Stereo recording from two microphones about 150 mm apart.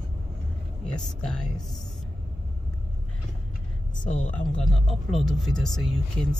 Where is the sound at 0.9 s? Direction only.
5° left (ahead or behind).